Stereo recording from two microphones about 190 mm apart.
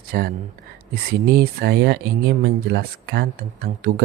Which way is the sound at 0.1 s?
55° right (ahead or behind).